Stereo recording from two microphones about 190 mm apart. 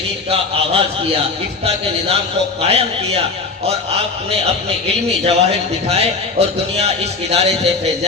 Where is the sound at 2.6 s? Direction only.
30° right (ahead or behind).